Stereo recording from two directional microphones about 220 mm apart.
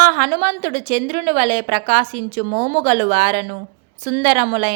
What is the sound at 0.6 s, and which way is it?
Speech, 45° right (ahead or behind).